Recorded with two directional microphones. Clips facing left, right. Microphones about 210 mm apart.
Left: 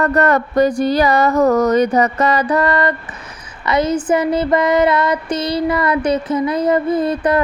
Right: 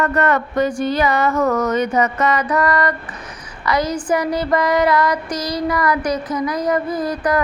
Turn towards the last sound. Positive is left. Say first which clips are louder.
# left 4 dB
turn(degrees=25)  # may be behind; listen again after turning